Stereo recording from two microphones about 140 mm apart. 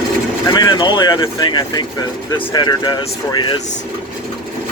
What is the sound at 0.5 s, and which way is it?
Speech, 30° left (ahead or behind).